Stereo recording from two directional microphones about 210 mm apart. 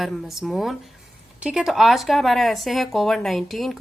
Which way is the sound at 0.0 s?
Centre (ahead or behind).